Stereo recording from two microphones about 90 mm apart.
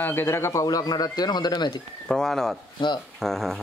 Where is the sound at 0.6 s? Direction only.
50° left (ahead or behind).